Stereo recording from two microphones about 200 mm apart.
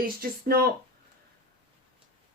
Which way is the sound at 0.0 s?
50° right (ahead or behind).